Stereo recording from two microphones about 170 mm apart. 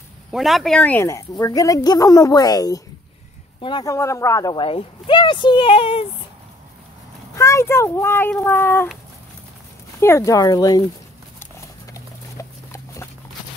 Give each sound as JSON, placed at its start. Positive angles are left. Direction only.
{"t": 0.3, "sound": "speech", "side_deg": 0}
{"t": 4.6, "sound": "speech", "side_deg": 30}
{"t": 7.3, "sound": "speech", "side_deg": 15}
{"t": 9.9, "sound": "speech", "side_deg": 15}
{"t": 11.9, "sound": "clip-clop", "side_deg": 20}